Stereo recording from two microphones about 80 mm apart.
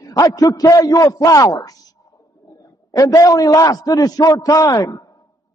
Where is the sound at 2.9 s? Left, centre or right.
Left.